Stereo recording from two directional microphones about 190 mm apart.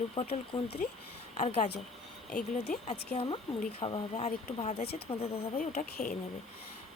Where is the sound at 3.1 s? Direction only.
30° left (ahead or behind).